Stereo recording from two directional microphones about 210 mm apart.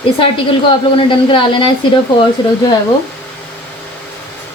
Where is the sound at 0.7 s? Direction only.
25° left (ahead or behind).